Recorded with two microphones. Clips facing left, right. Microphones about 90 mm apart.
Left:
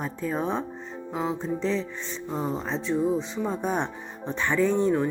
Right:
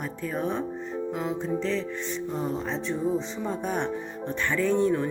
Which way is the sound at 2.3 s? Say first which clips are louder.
Left 3 dB; 20° left (ahead or behind).